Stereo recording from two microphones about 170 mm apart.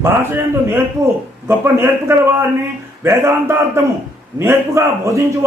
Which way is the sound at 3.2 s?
15° right (ahead or behind).